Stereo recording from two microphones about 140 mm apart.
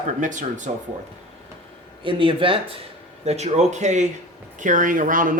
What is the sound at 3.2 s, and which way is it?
Speech, 50° right (ahead or behind).